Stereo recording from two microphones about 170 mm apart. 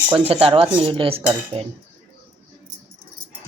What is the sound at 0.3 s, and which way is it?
Speech, 35° right (ahead or behind).